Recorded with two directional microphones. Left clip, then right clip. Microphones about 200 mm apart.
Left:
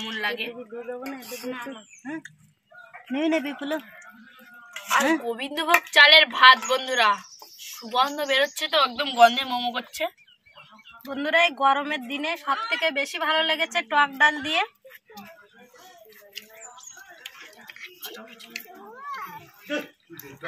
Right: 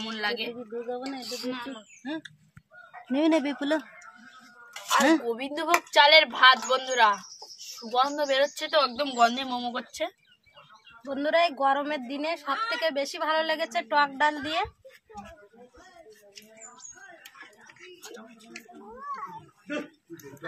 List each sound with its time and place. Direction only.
0.0 s a woman's voice: 15° right (ahead or behind)
1.5 s speech: 35° right (ahead or behind)
5.2 s a woman's voice: 10° right (ahead or behind)
11.1 s a woman's voice: 30° right (ahead or behind)